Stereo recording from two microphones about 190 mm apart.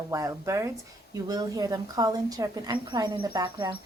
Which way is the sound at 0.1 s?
15° right (ahead or behind).